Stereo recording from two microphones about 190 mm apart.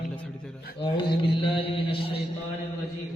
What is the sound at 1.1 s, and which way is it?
Mantra, 25° left (ahead or behind).